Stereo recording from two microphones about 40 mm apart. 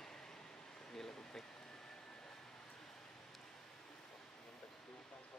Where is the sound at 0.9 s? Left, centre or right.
Centre.